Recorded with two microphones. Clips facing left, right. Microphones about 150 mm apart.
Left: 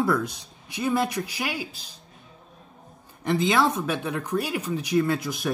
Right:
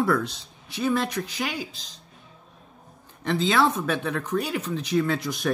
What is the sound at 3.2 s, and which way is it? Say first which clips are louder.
Speech: even; 15° left (ahead or behind).